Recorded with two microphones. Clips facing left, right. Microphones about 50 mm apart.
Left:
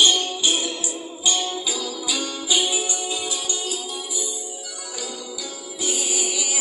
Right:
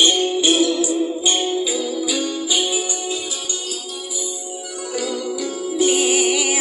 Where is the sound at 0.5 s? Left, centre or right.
Right.